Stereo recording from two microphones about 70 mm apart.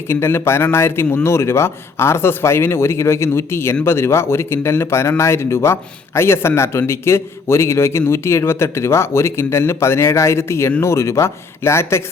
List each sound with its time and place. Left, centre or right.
0.1 s speech: left